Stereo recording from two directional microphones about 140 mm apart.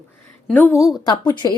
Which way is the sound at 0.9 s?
30° left (ahead or behind).